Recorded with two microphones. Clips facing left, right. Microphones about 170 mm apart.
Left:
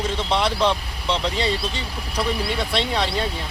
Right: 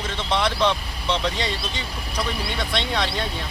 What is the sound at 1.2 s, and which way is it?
Speech, 30° left (ahead or behind).